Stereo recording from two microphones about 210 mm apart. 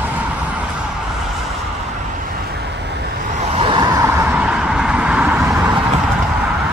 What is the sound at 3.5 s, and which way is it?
Vehicle, 25° right (ahead or behind).